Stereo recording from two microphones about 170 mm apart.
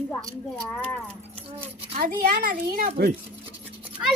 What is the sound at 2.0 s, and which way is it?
Speech, 55° right (ahead or behind).